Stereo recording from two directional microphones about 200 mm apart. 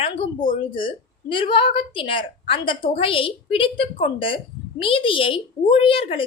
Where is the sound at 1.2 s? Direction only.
25° left (ahead or behind).